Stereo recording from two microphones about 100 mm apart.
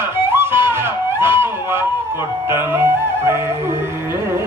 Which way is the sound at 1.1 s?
25° right (ahead or behind).